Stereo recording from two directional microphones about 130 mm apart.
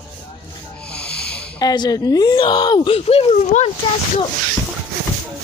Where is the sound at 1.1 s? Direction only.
5° left (ahead or behind).